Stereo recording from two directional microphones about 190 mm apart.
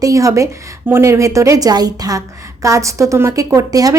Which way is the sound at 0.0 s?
15° right (ahead or behind).